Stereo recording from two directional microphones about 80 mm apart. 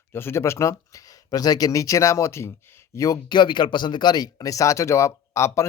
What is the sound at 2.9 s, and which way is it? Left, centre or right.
Speech, left.